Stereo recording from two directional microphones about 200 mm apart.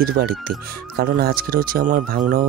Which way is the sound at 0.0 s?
50° right (ahead or behind).